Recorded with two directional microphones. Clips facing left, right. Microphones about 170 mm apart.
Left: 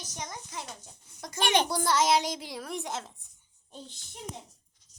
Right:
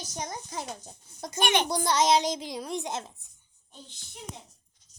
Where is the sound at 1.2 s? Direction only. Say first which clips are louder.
Right 3 dB; 20° right (ahead or behind).